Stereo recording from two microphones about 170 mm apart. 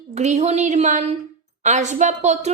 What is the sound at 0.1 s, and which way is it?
A woman's voice, 40° right (ahead or behind).